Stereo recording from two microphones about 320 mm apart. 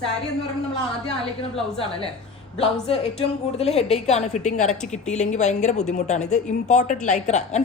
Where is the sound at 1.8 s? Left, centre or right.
Centre.